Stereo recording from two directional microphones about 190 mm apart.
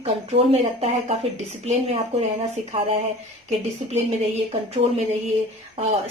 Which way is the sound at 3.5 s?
35° right (ahead or behind).